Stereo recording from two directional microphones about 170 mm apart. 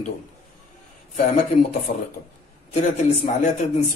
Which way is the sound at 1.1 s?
45° left (ahead or behind).